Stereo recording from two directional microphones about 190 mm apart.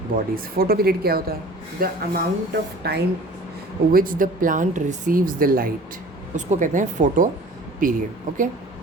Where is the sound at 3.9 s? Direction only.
45° right (ahead or behind).